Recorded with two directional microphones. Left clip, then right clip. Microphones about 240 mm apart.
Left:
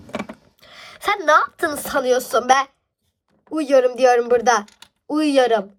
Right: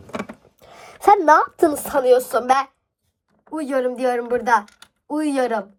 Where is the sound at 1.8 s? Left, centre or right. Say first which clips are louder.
Right 2 dB; centre.